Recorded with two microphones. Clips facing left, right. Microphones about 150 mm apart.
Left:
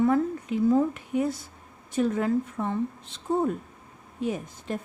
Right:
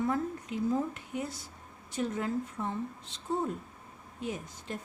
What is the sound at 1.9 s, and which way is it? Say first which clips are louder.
Speech: left 8 dB; 65° left (ahead or behind).